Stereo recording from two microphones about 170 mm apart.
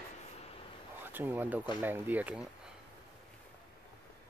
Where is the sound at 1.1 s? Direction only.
10° right (ahead or behind).